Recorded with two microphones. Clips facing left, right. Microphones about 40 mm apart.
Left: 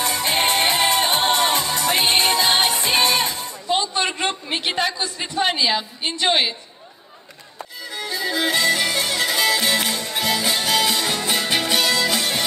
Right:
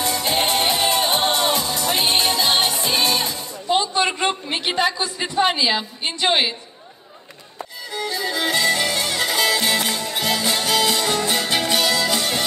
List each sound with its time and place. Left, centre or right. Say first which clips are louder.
0.0 s music: even; left
4.6 s a woman's voice: right 1 dB; centre
7.9 s music: even; centre